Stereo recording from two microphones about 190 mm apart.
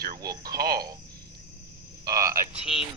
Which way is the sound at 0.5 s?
55° right (ahead or behind).